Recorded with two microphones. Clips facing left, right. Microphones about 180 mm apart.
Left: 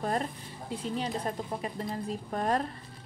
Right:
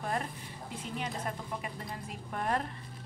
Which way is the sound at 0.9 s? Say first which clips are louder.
Left 4 dB; 35° left (ahead or behind).